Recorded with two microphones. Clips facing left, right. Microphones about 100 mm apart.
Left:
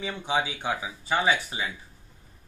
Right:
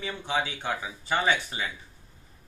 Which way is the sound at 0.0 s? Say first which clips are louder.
Left 2 dB; 15° left (ahead or behind).